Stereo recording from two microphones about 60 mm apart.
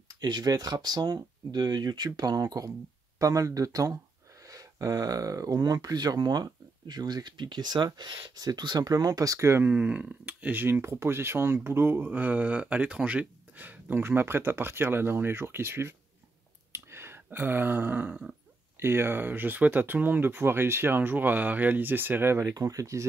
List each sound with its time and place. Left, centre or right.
0.4 s speech: right
3.2 s speech: right
8.4 s speech: right
9.7 s speech: right
10.8 s speech: right
16.7 s a sound: right
18.8 s speech: right
22.5 s speech: right